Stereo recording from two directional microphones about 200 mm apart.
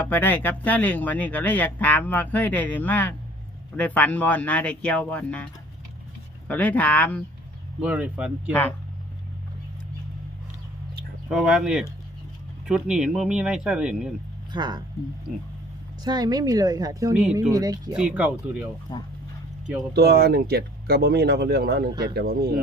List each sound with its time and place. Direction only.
0.0 s speech: 10° left (ahead or behind)
6.5 s speech: 10° left (ahead or behind)
7.8 s speech: 5° right (ahead or behind)
11.3 s speech: 5° right (ahead or behind)
14.5 s speech: 20° right (ahead or behind)
16.0 s speech: 20° right (ahead or behind)
17.9 s speech: 5° right (ahead or behind)
18.9 s speech: 20° left (ahead or behind)
20.0 s speech: 50° right (ahead or behind)